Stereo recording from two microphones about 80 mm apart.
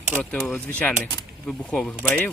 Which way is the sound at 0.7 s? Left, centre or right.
Centre.